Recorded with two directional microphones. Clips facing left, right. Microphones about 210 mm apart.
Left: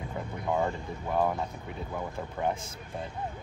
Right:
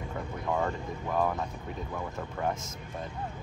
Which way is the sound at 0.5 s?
15° left (ahead or behind).